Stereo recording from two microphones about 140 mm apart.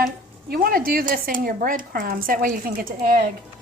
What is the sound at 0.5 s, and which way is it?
Speech, 90° right.